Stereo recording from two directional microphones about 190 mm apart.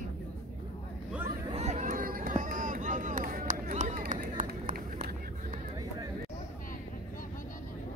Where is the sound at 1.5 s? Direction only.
35° right (ahead or behind).